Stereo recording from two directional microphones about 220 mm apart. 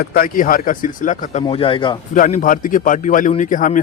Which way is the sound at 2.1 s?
35° left (ahead or behind).